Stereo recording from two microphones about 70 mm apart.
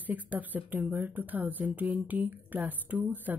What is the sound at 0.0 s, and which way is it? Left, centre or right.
A woman's voice, right.